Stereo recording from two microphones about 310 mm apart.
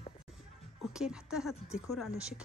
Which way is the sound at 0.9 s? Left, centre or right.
Centre.